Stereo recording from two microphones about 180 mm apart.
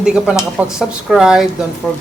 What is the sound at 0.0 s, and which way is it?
Speech, 5° right (ahead or behind).